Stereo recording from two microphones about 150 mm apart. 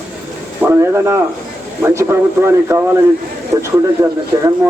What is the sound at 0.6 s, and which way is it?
A man's voice, 15° right (ahead or behind).